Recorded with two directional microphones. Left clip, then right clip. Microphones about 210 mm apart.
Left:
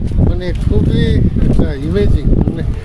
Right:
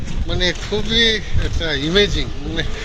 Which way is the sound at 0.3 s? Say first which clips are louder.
Even; 20° left (ahead or behind).